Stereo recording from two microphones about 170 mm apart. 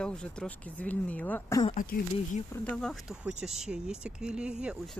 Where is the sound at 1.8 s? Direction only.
55° left (ahead or behind).